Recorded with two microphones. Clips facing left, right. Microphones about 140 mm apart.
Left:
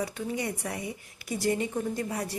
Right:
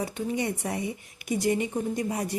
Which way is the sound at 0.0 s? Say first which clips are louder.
Right 3 dB; 20° right (ahead or behind).